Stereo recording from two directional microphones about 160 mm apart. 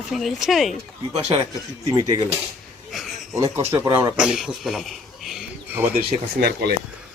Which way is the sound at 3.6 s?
20° right (ahead or behind).